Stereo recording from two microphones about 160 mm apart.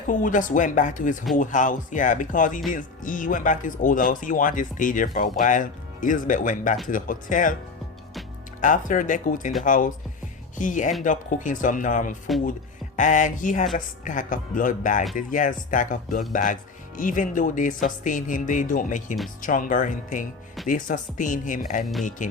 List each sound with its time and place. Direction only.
0.1 s speech: 55° left (ahead or behind)
8.6 s speech: 55° left (ahead or behind)